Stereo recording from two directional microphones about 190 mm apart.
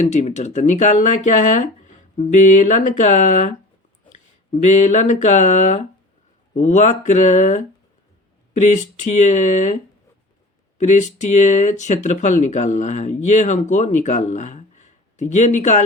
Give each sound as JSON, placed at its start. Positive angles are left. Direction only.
{"t": 0.0, "sound": "speech", "side_deg": 40}
{"t": 10.8, "sound": "speech", "side_deg": 40}